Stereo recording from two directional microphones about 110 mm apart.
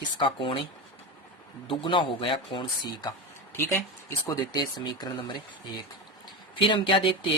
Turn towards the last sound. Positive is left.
turn(degrees=50)  # may be behind; listen again after turning